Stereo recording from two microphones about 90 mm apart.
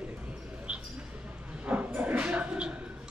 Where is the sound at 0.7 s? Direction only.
10° right (ahead or behind).